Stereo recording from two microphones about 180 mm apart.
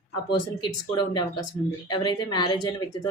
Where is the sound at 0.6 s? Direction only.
25° left (ahead or behind).